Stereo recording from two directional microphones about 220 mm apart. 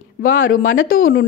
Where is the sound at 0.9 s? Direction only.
40° left (ahead or behind).